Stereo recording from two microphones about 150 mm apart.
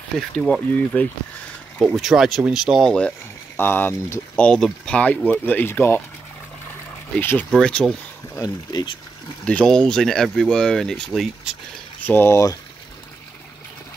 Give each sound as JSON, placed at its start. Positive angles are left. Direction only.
{"t": 0.2, "sound": "speech", "side_deg": 5}
{"t": 3.5, "sound": "speech", "side_deg": 15}
{"t": 7.2, "sound": "speech", "side_deg": 15}
{"t": 8.4, "sound": "speech", "side_deg": 25}
{"t": 9.4, "sound": "speech", "side_deg": 10}
{"t": 12.0, "sound": "speech", "side_deg": 15}